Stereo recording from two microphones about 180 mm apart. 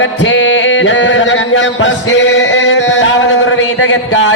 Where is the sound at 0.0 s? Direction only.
90° left.